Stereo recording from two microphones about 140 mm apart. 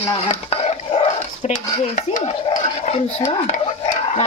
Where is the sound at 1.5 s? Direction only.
65° left (ahead or behind).